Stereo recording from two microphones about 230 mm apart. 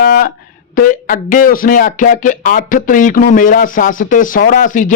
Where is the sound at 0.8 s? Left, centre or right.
Left.